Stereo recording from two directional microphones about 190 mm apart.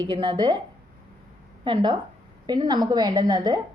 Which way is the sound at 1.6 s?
25° right (ahead or behind).